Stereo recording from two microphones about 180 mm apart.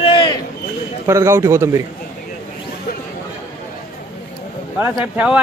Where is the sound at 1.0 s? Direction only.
15° right (ahead or behind).